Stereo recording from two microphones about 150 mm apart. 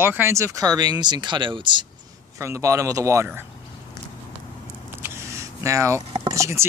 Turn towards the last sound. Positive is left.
turn(degrees=-20)  # may be behind; listen again after turning